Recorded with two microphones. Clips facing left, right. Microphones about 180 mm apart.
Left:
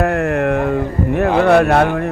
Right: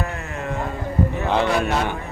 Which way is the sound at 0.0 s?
60° left (ahead or behind).